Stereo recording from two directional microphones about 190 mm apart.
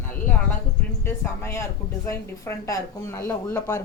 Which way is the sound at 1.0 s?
15° left (ahead or behind).